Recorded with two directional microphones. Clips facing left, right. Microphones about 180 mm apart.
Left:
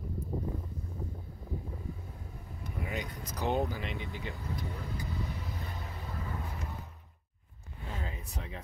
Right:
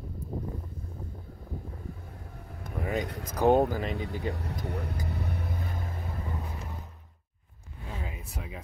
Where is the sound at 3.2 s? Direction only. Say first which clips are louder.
Right 10 dB; 50° right (ahead or behind).